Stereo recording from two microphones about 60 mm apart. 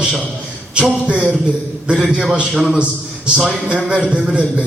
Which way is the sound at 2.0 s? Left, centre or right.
Centre.